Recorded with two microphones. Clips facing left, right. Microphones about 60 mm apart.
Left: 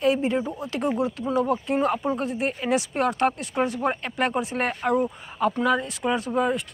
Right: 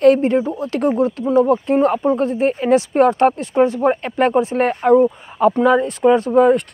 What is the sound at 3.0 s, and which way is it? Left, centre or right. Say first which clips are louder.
Speech: right 9 dB; right.